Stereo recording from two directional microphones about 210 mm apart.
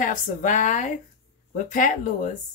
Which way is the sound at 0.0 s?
40° left (ahead or behind).